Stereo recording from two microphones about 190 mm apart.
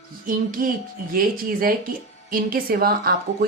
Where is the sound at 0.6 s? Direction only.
45° right (ahead or behind).